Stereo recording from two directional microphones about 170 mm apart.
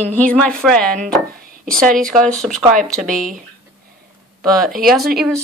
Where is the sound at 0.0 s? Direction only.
10° left (ahead or behind).